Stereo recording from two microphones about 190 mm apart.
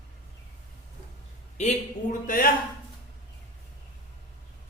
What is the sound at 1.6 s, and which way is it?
Speech, 40° left (ahead or behind).